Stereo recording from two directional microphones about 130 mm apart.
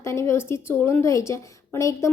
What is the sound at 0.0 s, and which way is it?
A woman's voice, 20° left (ahead or behind).